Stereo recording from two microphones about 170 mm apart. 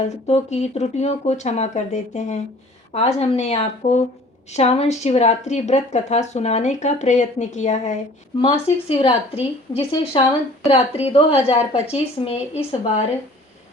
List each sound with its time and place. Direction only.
0.3 s speech: 40° left (ahead or behind)